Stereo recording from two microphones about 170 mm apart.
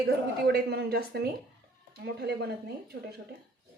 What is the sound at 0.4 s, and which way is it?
Speech, 75° right (ahead or behind).